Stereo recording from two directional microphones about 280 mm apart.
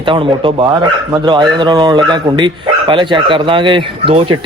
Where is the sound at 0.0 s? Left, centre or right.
Centre.